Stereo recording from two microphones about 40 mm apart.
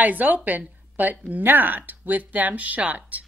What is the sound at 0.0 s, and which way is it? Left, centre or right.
A woman's voice, right.